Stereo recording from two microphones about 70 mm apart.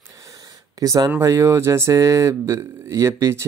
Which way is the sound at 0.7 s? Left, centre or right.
Right.